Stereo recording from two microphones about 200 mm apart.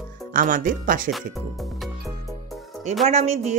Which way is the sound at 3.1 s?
35° right (ahead or behind).